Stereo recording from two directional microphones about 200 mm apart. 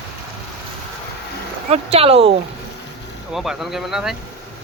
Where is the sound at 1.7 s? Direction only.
30° right (ahead or behind).